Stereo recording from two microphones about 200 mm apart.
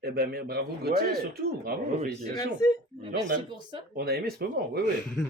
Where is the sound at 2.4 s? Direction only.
20° left (ahead or behind).